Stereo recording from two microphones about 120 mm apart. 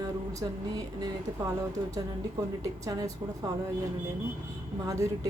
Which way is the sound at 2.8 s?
30° right (ahead or behind).